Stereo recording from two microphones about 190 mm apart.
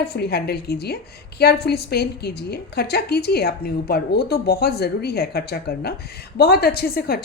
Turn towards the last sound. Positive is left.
turn(degrees=55)  # may be behind; listen again after turning